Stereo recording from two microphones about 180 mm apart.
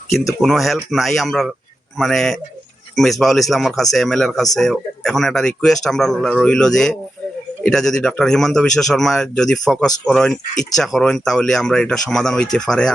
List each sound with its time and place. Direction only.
0.4 s speech: centre (ahead or behind)